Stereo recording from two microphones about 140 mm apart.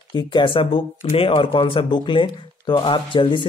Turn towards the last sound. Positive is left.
turn(degrees=35)  # may be behind; listen again after turning